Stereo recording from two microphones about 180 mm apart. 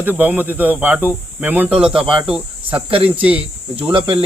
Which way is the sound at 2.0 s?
30° right (ahead or behind).